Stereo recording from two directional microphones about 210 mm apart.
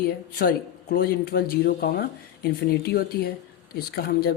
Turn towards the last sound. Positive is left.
turn(degrees=50)  # may be behind; listen again after turning